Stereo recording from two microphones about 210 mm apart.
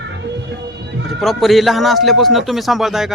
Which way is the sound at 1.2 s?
Centre (ahead or behind).